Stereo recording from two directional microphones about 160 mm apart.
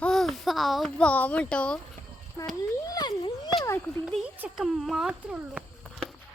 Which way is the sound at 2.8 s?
25° left (ahead or behind).